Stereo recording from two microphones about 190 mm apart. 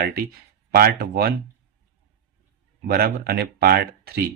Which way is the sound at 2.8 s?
55° right (ahead or behind).